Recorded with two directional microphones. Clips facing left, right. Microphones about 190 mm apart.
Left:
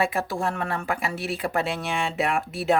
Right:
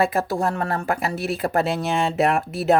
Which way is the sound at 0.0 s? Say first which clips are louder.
Right 4 dB; 40° right (ahead or behind).